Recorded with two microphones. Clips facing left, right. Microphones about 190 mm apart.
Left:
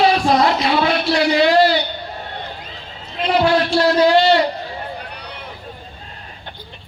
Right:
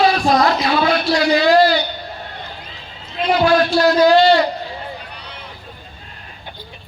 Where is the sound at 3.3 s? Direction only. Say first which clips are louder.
Right 1 dB; 25° left (ahead or behind).